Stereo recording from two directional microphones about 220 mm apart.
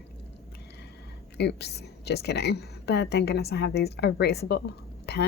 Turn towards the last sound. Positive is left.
turn(degrees=45)  # may be behind; listen again after turning